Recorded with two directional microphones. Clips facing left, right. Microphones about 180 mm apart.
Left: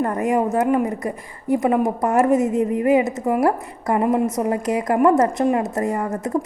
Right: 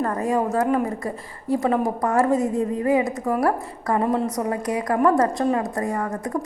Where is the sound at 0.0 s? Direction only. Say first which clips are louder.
Left 3 dB; 20° left (ahead or behind).